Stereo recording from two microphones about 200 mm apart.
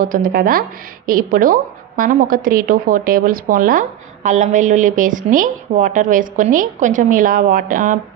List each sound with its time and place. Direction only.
0.0 s speech: 45° right (ahead or behind)